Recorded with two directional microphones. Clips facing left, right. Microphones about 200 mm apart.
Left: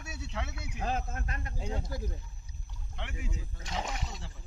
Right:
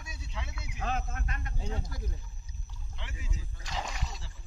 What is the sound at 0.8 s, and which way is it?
Speech, 40° left (ahead or behind).